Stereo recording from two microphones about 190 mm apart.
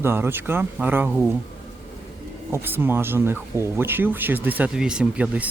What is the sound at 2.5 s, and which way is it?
Speech, 10° right (ahead or behind).